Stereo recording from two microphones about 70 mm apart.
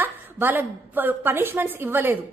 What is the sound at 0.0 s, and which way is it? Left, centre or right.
A woman's voice, right.